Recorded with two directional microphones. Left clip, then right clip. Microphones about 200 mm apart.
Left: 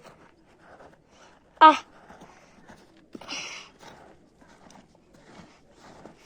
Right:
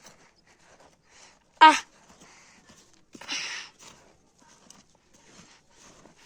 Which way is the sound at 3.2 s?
25° right (ahead or behind).